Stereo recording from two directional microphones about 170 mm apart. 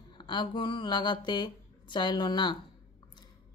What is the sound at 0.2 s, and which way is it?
A woman's voice, 25° left (ahead or behind).